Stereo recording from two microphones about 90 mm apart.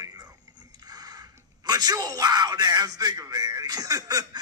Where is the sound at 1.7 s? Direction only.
45° right (ahead or behind).